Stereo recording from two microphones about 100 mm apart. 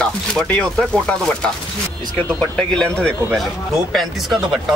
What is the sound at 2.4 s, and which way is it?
Speech, 10° left (ahead or behind).